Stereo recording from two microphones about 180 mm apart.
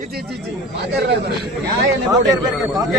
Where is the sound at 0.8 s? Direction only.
65° right (ahead or behind).